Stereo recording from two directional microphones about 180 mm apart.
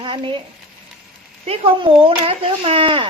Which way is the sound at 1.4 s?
30° right (ahead or behind).